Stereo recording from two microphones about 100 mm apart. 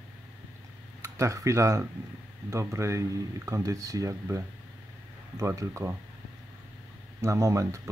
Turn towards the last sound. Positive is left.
turn(degrees=-35)  # may be behind; listen again after turning